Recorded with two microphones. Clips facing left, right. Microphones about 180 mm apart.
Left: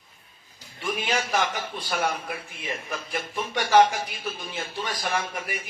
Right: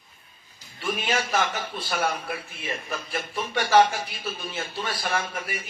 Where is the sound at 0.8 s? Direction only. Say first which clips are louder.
Right 1 dB; 15° left (ahead or behind).